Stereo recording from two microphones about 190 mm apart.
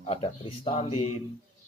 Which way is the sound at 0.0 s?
30° left (ahead or behind).